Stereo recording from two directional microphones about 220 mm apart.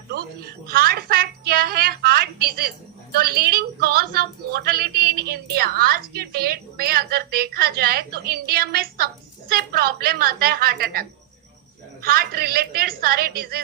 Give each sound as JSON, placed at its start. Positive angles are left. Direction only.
{"t": 0.1, "sound": "a woman's voice", "side_deg": -45}
{"t": 12.1, "sound": "a woman's voice", "side_deg": -45}